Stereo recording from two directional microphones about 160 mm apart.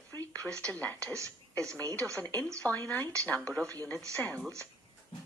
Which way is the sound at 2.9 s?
10° left (ahead or behind).